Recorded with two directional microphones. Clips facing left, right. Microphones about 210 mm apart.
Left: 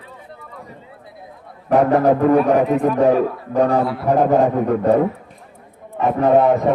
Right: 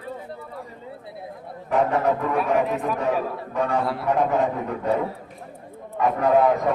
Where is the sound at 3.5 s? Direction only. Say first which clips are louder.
Left 7 dB; 35° left (ahead or behind).